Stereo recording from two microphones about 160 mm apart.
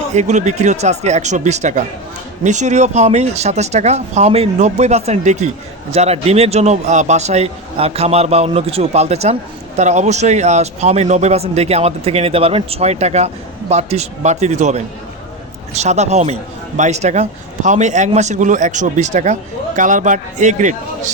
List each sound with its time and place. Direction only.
0.1 s speech: 50° right (ahead or behind)